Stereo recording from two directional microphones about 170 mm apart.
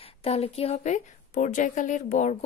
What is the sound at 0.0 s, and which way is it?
Speech, 35° left (ahead or behind).